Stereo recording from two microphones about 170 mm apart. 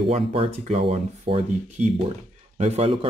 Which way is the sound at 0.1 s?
35° right (ahead or behind).